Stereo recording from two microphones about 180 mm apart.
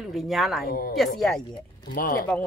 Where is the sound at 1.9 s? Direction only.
50° left (ahead or behind).